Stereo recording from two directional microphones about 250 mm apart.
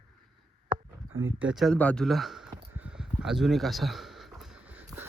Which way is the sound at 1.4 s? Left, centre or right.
Centre.